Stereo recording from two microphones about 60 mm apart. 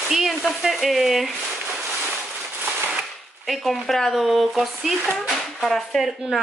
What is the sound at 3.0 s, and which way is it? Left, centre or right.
Speech, centre.